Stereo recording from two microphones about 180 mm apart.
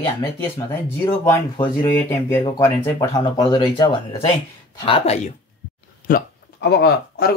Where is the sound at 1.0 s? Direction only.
15° left (ahead or behind); by 5.2 s 30° left (ahead or behind).